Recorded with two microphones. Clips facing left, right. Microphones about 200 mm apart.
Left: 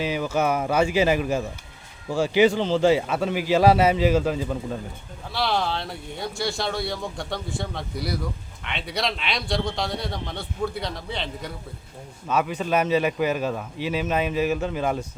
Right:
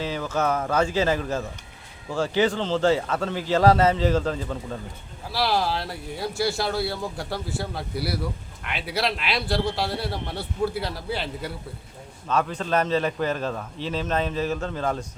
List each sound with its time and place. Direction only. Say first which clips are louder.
0.0 s a man's voice: left 2 dB; 15° left (ahead or behind)
5.3 s speech: right 1 dB; 5° right (ahead or behind)
12.3 s a man's voice: left 1 dB; 5° left (ahead or behind)